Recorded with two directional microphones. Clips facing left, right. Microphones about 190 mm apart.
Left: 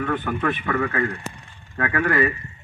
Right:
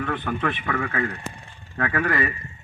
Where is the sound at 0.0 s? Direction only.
10° left (ahead or behind).